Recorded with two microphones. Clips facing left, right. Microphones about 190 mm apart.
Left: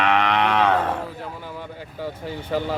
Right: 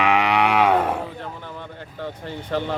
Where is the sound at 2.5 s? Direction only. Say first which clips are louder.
Even; 5° left (ahead or behind).